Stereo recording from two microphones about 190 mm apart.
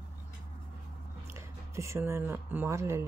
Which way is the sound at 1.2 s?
15° right (ahead or behind).